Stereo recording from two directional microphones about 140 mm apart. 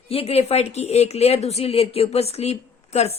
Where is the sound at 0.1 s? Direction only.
45° left (ahead or behind).